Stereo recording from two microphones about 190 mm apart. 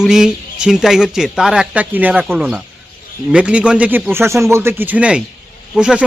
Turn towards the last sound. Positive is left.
turn(degrees=-5)  # may be behind; listen again after turning